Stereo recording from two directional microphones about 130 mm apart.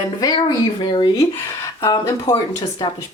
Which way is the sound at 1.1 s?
25° left (ahead or behind).